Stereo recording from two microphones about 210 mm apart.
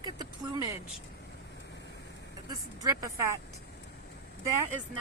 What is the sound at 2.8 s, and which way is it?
Speech, 15° right (ahead or behind).